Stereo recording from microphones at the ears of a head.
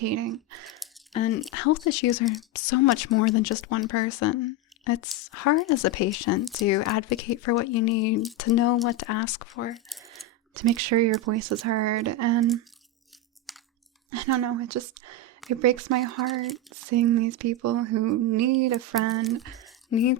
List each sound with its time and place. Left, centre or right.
0.0 s speech: right
1.1 s speech: left
10.1 s speech: right
14.1 s speech: right